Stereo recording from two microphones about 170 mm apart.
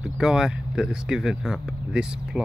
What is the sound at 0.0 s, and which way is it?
Speech, 5° right (ahead or behind).